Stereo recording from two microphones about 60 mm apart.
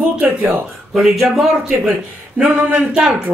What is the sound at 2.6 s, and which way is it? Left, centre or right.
Speech, right.